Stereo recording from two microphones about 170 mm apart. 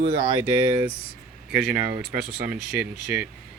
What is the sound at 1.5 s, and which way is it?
Speech, 5° right (ahead or behind).